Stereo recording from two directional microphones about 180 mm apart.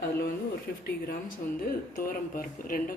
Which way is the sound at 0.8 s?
55° left (ahead or behind).